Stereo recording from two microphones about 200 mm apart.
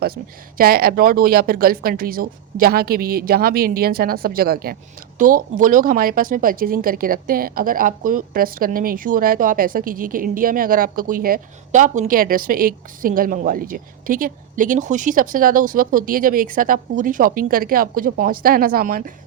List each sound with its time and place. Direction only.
0.5 s speech: 45° right (ahead or behind)